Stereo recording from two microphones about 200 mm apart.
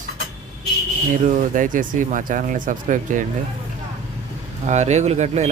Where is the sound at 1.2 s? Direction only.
40° right (ahead or behind).